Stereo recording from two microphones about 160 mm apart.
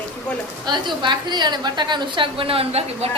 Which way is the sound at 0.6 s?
30° right (ahead or behind).